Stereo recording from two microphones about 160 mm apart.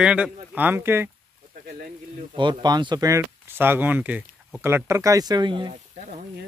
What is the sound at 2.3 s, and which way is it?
Speech, 25° right (ahead or behind).